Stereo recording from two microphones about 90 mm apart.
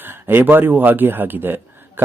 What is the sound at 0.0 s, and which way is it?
Speech, 25° right (ahead or behind).